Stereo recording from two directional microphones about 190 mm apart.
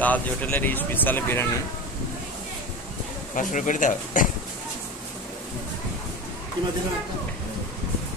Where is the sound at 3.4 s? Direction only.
40° left (ahead or behind).